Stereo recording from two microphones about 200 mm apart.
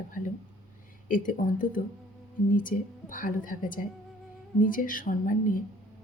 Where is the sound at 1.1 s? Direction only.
40° left (ahead or behind).